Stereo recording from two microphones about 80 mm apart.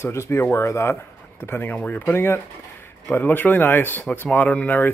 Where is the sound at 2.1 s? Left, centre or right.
Left.